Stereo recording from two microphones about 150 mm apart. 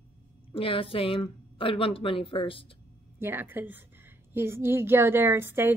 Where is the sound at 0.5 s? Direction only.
35° left (ahead or behind).